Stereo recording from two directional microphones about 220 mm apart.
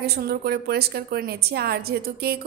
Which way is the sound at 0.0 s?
45° right (ahead or behind).